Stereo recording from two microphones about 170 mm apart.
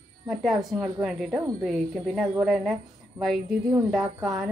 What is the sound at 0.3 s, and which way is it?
Speech, centre (ahead or behind).